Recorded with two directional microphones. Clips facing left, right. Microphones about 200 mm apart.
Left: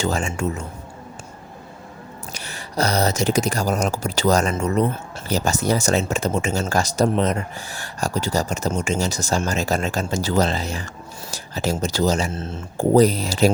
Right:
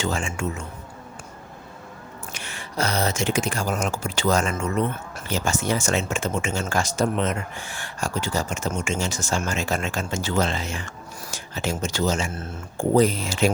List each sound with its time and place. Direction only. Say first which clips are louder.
0.0 s speech: left 4 dB; 40° left (ahead or behind)
2.3 s speech: left 4 dB; 40° left (ahead or behind)